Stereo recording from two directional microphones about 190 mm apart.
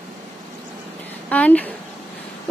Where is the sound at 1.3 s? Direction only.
5° left (ahead or behind).